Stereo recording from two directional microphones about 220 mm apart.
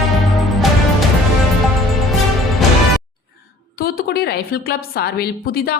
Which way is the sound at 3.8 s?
45° left (ahead or behind).